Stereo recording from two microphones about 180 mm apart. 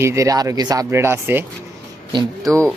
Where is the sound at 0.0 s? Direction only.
15° right (ahead or behind).